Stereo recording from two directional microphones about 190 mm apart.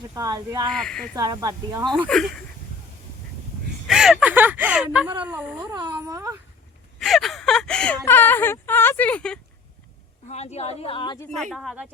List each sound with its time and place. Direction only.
0.1 s speech: 20° right (ahead or behind)
0.7 s speech: 5° left (ahead or behind)
1.1 s speech: 20° right (ahead or behind)
2.0 s speech: 5° left (ahead or behind)
3.8 s a sound: centre (ahead or behind)
5.2 s speech: 5° right (ahead or behind)
7.0 s a sound: centre (ahead or behind)
8.0 s speech: 10° left (ahead or behind)
10.2 s speech: 35° left (ahead or behind)
11.5 s speech: 5° right (ahead or behind)